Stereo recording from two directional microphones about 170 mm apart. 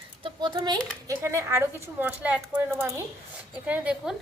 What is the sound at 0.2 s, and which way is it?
A woman's voice, 25° right (ahead or behind).